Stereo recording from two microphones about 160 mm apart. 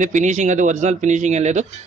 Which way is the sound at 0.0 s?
50° right (ahead or behind).